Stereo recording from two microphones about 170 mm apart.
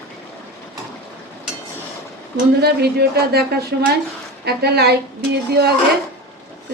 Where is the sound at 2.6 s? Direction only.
70° right (ahead or behind).